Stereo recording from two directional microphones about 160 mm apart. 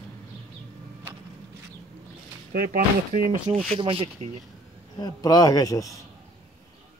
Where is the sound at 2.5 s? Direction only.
65° right (ahead or behind).